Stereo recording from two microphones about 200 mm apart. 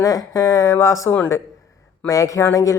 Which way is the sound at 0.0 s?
15° left (ahead or behind).